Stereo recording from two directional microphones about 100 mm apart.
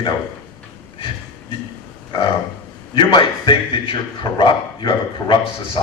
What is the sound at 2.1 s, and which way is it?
A man's voice, 55° left (ahead or behind).